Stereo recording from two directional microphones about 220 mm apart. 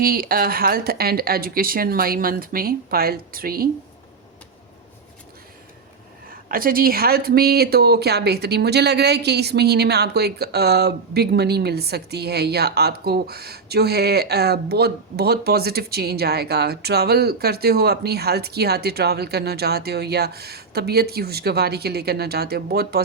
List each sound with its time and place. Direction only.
0.0 s speech: 40° right (ahead or behind)
6.3 s speech: 40° right (ahead or behind)